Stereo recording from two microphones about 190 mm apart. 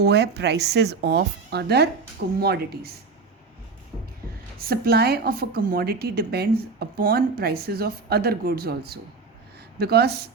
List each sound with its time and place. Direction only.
0.0 s speech: 60° right (ahead or behind)
4.5 s a woman's voice: 50° right (ahead or behind)